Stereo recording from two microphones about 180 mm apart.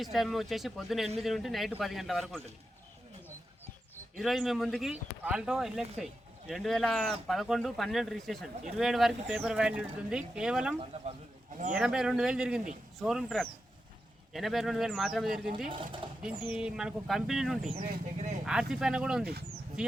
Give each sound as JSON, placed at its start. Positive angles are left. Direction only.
{"t": 0.0, "sound": "speech", "side_deg": 0}
{"t": 4.2, "sound": "speech", "side_deg": 0}
{"t": 15.7, "sound": "speech", "side_deg": -25}
{"t": 16.4, "sound": "speech", "side_deg": -5}
{"t": 17.8, "sound": "speech", "side_deg": -50}
{"t": 18.7, "sound": "speech", "side_deg": -5}
{"t": 19.2, "sound": "speech", "side_deg": -60}
{"t": 19.8, "sound": "speech", "side_deg": -5}